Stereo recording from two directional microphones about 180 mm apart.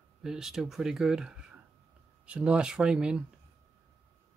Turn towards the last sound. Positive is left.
turn(degrees=-5)  # may be behind; listen again after turning